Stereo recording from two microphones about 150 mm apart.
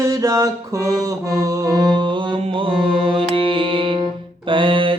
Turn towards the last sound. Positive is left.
turn(degrees=-35)  # may be behind; listen again after turning